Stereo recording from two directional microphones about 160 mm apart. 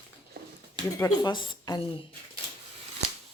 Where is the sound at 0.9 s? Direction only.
20° left (ahead or behind).